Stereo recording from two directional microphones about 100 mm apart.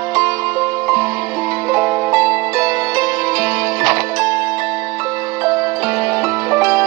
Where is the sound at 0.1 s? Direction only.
35° right (ahead or behind).